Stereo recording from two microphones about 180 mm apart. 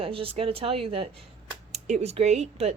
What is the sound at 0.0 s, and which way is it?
A woman's voice, 30° right (ahead or behind).